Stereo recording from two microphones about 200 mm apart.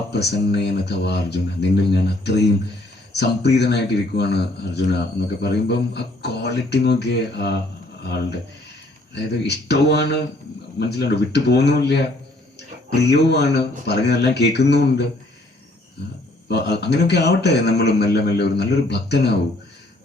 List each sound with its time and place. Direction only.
0.1 s a man's voice: 55° left (ahead or behind)
9.5 s a man's voice: 55° left (ahead or behind)
16.5 s a man's voice: 55° left (ahead or behind)